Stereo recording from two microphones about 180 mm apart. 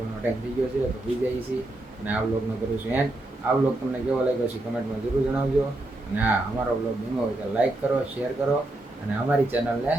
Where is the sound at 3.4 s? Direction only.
10° right (ahead or behind).